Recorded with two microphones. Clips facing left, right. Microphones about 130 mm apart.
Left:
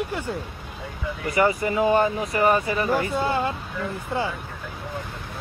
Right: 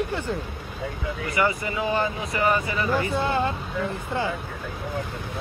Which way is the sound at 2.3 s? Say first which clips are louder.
Left 1 dB; 45° left (ahead or behind).